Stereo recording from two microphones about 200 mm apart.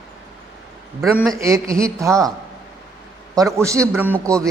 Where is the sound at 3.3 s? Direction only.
15° right (ahead or behind).